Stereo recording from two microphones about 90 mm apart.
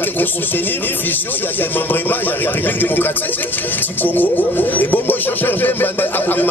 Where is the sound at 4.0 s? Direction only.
20° left (ahead or behind).